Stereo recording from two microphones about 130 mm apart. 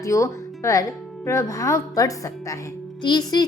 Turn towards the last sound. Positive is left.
turn(degrees=30)  # may be behind; listen again after turning